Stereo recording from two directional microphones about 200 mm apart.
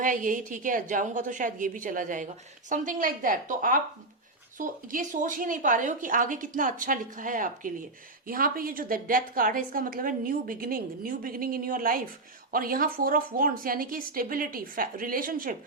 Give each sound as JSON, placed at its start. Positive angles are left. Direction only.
{"t": 0.0, "sound": "a woman's voice", "side_deg": -40}